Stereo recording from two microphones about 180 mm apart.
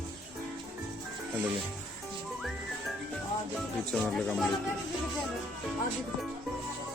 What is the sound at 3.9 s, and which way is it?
Speech, 5° left (ahead or behind).